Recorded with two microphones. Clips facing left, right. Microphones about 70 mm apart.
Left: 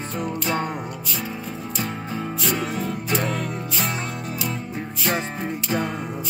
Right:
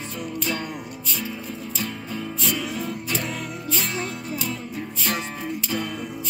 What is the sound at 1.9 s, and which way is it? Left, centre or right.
Music, left.